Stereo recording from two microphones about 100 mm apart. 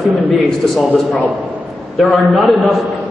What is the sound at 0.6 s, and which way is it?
Speech, centre (ahead or behind).